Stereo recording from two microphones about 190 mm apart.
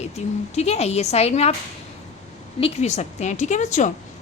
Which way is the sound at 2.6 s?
35° left (ahead or behind).